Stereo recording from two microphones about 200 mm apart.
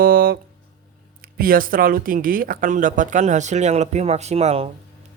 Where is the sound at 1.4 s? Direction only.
45° right (ahead or behind).